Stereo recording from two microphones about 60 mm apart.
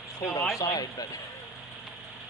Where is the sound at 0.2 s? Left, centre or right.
Left.